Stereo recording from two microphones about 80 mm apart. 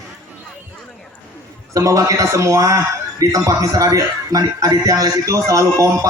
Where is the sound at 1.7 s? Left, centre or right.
Right.